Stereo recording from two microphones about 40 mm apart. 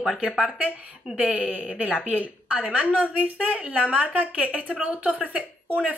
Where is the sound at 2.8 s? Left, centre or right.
Right.